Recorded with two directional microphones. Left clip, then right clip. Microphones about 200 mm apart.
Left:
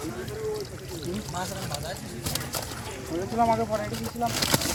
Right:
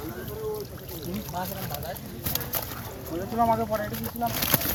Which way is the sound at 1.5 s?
Centre (ahead or behind).